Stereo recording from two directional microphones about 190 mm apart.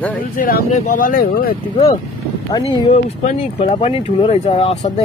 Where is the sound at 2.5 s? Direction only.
20° left (ahead or behind).